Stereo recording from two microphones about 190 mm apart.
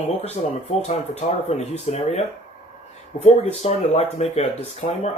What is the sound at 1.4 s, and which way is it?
Speech, 35° left (ahead or behind).